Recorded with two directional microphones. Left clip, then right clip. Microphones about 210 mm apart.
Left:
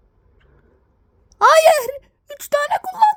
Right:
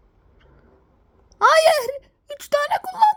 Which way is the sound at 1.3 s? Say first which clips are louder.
Left 3 dB; 15° left (ahead or behind).